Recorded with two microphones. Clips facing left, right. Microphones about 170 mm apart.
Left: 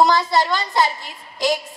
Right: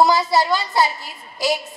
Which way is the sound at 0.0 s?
Centre (ahead or behind).